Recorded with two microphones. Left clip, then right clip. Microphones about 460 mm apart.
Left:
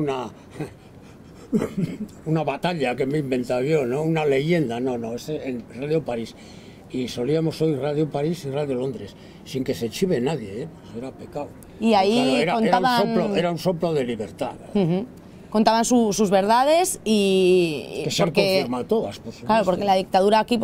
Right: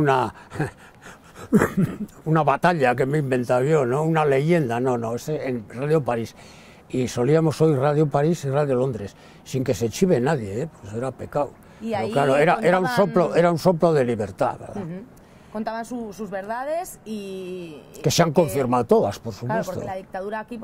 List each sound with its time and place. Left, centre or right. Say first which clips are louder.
0.0 s speech: right 6 dB; right
1.5 s speech: right 5 dB; right
11.0 s speech: right 7 dB; right
11.8 s a woman's voice: left 8 dB; left
12.4 s speech: even; right
14.8 s a woman's voice: left 11 dB; left
18.0 s speech: right 2 dB; right
19.4 s a woman's voice: left 7 dB; left